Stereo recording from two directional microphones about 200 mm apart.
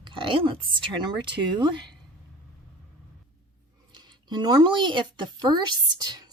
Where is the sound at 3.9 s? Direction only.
20° right (ahead or behind).